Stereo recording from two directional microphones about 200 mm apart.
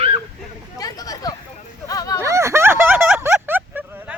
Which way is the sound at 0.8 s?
20° left (ahead or behind).